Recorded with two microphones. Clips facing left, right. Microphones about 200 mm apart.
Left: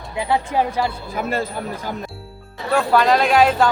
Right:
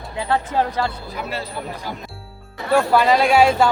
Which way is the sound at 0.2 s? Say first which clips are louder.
Left 1 dB; 15° left (ahead or behind).